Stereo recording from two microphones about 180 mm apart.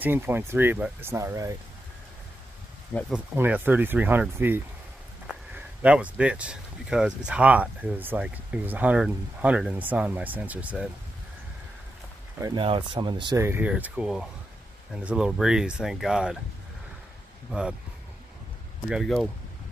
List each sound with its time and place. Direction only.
0.0 s speech: 10° right (ahead or behind)
3.1 s speech: 10° right (ahead or behind)
12.5 s speech: 30° right (ahead or behind)
13.4 s speech: 10° right (ahead or behind)
17.5 s speech: 5° right (ahead or behind)
18.9 s speech: centre (ahead or behind)